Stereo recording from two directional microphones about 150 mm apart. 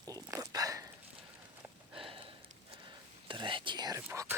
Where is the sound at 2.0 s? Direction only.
35° right (ahead or behind).